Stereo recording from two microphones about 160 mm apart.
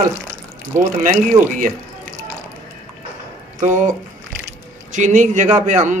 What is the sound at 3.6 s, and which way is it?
A man's voice, 50° right (ahead or behind).